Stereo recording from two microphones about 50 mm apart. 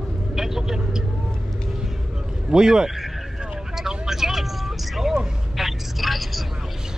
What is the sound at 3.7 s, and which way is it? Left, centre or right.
Vehicle, centre.